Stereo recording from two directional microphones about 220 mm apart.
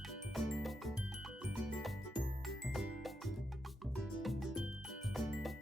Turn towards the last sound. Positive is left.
turn(degrees=0)  # may be behind; listen again after turning